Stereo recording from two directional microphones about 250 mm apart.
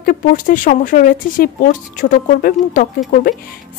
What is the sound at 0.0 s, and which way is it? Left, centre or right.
A woman's voice, left.